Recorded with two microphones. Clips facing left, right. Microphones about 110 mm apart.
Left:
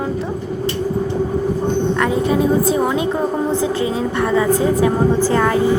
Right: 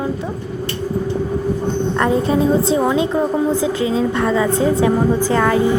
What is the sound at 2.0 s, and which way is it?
Speech, 35° right (ahead or behind).